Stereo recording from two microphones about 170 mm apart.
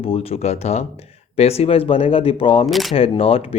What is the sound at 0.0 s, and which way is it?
A man's voice, 35° left (ahead or behind).